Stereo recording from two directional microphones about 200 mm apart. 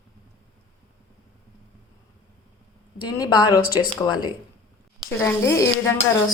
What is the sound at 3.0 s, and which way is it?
A woman's voice, 20° left (ahead or behind).